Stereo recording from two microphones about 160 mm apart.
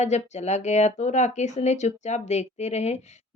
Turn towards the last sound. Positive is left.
turn(degrees=45)  # may be behind; listen again after turning